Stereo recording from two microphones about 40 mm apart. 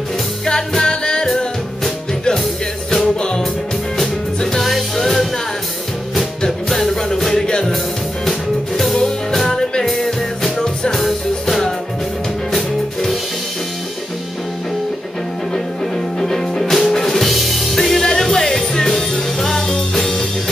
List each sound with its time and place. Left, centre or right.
0.5 s music: centre
3.2 s music: left
4.6 s music: centre
6.8 s music: centre
7.4 s music: left
8.3 s music: centre
8.9 s music: centre
9.8 s music: centre
16.2 s music: centre